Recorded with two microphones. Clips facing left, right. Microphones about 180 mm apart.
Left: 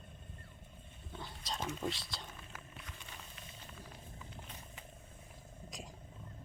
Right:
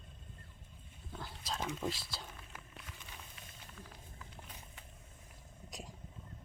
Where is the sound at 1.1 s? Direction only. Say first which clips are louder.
Right 1 dB; centre (ahead or behind).